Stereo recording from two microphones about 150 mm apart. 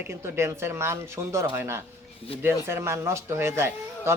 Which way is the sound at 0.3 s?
15° right (ahead or behind).